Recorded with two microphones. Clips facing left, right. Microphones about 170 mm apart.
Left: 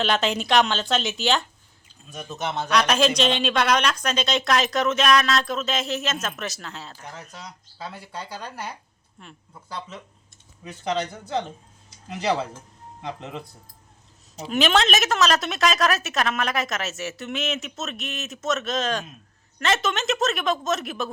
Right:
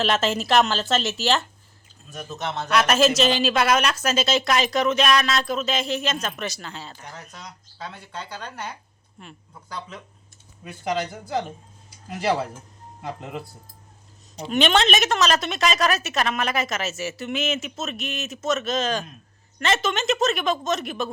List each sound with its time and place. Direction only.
0.0 s speech: centre (ahead or behind)
10.6 s speech: 10° right (ahead or behind)